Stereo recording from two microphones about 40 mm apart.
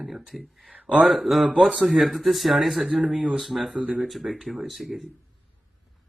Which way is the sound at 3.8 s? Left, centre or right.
Right.